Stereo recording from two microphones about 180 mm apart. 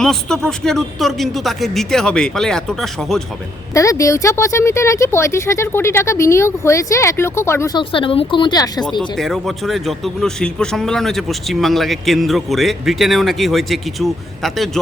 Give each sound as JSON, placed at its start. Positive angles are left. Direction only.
{"t": 0.0, "sound": "a man's voice", "side_deg": 5}
{"t": 3.8, "sound": "speech", "side_deg": 15}
{"t": 7.8, "sound": "speech", "side_deg": 30}
{"t": 9.0, "sound": "a man's voice", "side_deg": 0}